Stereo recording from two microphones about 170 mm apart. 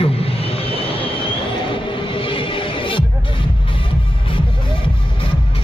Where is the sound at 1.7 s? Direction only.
30° left (ahead or behind).